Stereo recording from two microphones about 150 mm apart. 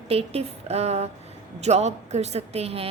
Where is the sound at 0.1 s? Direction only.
40° right (ahead or behind).